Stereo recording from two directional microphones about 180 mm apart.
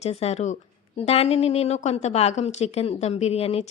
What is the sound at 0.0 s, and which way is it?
A woman's voice, 35° left (ahead or behind).